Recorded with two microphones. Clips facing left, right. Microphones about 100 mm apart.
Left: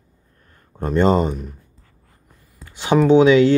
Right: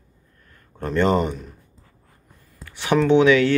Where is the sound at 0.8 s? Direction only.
20° left (ahead or behind).